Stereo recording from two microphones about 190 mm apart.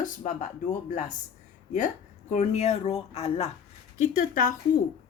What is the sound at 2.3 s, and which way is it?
Speech, 35° left (ahead or behind).